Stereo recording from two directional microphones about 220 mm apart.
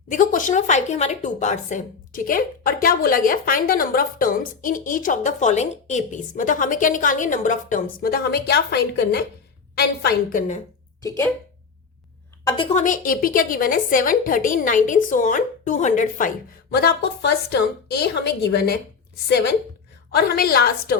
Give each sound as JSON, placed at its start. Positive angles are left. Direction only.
{"t": 0.1, "sound": "a woman's voice", "side_deg": 35}
{"t": 11.0, "sound": "speech", "side_deg": 10}
{"t": 12.5, "sound": "a woman's voice", "side_deg": 25}
{"t": 20.1, "sound": "a woman's voice", "side_deg": 45}